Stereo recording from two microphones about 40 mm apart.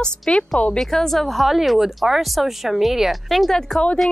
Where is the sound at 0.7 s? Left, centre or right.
Centre.